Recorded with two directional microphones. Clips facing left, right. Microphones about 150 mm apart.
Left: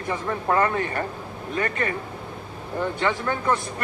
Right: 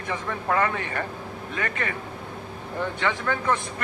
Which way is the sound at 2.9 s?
35° left (ahead or behind).